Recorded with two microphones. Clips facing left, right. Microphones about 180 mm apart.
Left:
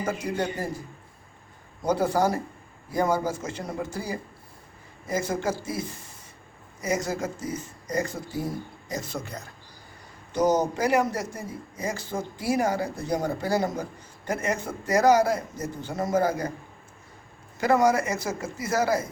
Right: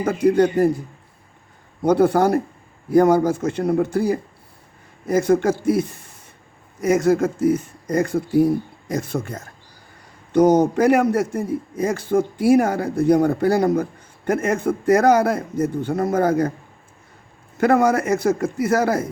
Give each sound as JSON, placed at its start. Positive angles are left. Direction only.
{"t": 0.0, "sound": "a man's voice", "side_deg": -60}
{"t": 1.8, "sound": "a man's voice", "side_deg": -60}
{"t": 6.8, "sound": "a man's voice", "side_deg": -60}
{"t": 17.6, "sound": "a man's voice", "side_deg": -60}